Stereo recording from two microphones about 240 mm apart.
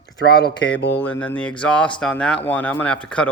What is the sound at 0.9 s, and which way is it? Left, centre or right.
Speech, centre.